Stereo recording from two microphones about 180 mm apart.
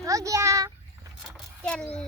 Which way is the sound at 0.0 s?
20° right (ahead or behind).